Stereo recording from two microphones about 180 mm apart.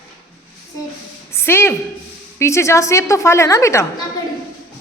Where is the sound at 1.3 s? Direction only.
15° left (ahead or behind).